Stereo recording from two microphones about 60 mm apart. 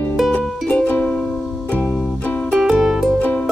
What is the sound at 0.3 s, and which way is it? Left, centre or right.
Music, left.